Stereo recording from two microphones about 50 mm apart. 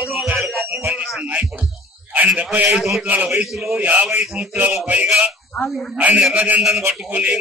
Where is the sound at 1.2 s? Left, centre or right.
Right.